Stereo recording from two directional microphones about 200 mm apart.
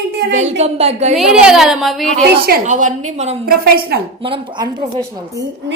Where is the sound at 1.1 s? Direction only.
Centre (ahead or behind).